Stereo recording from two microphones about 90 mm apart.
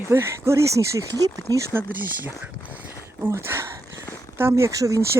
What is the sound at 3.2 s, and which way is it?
Speech, 25° right (ahead or behind).